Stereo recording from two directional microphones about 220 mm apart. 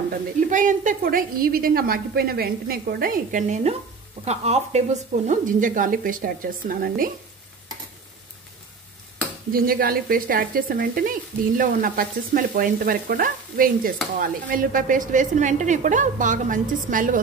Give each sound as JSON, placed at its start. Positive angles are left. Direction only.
{"t": 0.5, "sound": "speech", "side_deg": -35}
{"t": 9.5, "sound": "speech", "side_deg": -40}